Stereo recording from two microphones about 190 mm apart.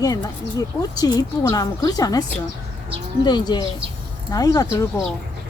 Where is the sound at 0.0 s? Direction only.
20° left (ahead or behind).